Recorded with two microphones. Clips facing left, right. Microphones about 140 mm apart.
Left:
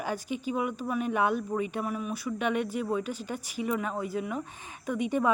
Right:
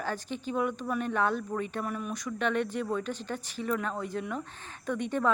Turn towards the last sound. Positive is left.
turn(degrees=10)  # may be behind; listen again after turning